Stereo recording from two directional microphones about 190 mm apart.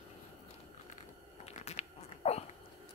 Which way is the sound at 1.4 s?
35° left (ahead or behind).